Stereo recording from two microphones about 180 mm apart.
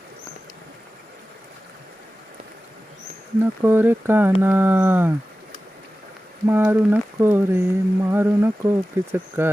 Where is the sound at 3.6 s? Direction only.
10° right (ahead or behind).